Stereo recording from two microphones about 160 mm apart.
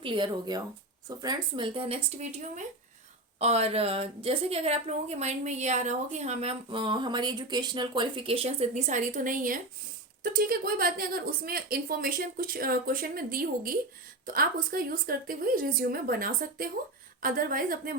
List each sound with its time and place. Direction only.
0.0 s a woman's voice: 30° right (ahead or behind); by 17.9 s 60° right (ahead or behind)